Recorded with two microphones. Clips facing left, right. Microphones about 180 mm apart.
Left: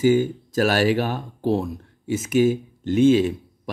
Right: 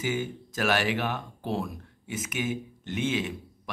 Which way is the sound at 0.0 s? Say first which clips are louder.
Left 12 dB; 35° left (ahead or behind).